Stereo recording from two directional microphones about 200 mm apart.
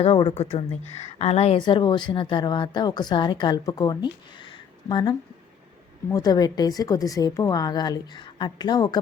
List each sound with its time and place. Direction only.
0.0 s a woman's voice: 25° left (ahead or behind)